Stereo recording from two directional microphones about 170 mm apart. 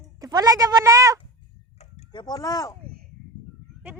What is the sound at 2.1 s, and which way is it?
Speech, 25° left (ahead or behind).